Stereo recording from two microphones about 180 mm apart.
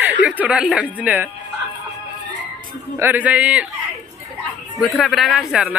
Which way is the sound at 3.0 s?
10° right (ahead or behind).